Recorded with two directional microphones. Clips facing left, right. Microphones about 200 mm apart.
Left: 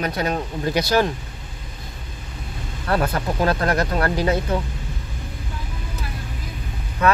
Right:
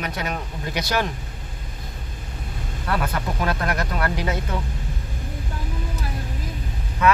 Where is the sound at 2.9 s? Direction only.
35° left (ahead or behind).